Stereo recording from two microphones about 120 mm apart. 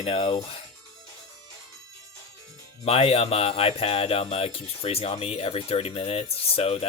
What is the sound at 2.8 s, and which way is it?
Music, 55° left (ahead or behind).